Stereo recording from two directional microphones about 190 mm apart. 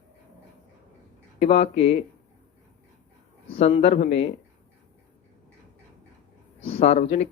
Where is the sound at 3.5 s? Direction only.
35° left (ahead or behind).